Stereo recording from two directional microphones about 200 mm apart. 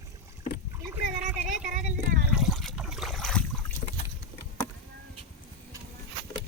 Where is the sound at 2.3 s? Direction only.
Centre (ahead or behind).